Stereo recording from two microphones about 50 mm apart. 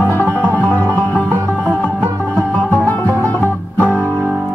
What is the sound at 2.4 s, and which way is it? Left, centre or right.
Music, centre.